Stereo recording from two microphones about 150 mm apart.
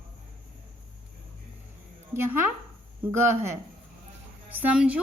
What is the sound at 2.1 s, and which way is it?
A woman's voice, 15° right (ahead or behind).